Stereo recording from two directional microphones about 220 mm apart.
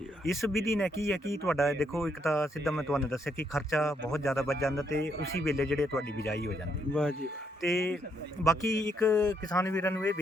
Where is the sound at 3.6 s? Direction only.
Centre (ahead or behind).